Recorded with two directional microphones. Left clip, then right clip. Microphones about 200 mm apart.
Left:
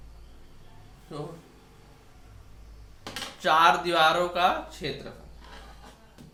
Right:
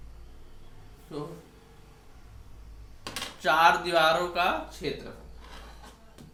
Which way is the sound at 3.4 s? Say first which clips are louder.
Left 1 dB; 35° left (ahead or behind).